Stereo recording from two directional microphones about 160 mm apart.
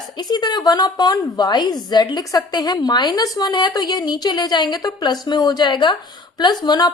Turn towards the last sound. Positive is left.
turn(degrees=25)  # may be behind; listen again after turning